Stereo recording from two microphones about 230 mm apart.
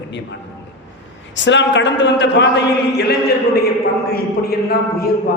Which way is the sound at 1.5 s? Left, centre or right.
Left.